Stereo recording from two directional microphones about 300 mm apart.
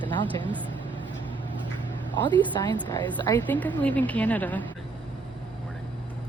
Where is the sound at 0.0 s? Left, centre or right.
Centre.